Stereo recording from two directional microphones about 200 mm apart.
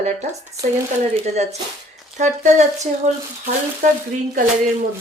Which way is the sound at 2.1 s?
35° right (ahead or behind).